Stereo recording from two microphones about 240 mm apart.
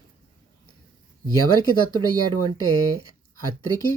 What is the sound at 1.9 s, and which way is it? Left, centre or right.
Speech, right.